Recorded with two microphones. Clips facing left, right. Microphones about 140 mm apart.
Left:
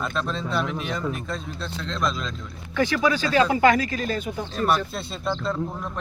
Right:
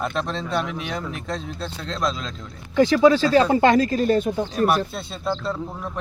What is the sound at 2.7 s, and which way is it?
Speech, 20° right (ahead or behind).